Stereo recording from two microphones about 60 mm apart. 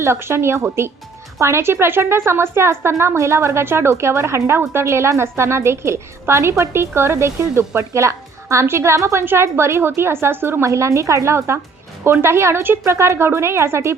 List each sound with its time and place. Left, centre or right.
0.0 s a woman's voice: right
9.2 s a woman's voice: right
10.7 s a woman's voice: right